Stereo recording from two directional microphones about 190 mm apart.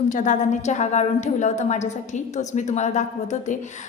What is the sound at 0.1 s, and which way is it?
A woman's voice, 40° left (ahead or behind).